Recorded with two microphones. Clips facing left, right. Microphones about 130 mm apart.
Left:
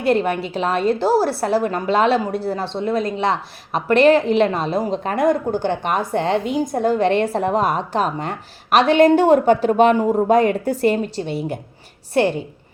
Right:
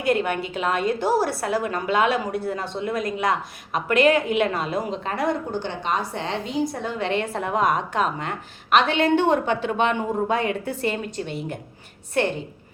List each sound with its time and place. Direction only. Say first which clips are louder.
0.1 s a woman's voice: left 4 dB; 35° left (ahead or behind)
5.0 s a woman's voice: left 7 dB; 45° left (ahead or behind)